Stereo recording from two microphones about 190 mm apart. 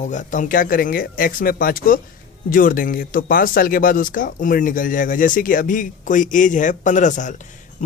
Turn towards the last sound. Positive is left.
turn(degrees=40)  # may be behind; listen again after turning